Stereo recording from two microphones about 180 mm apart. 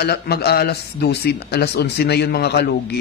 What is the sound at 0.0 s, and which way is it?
Speech, 60° left (ahead or behind).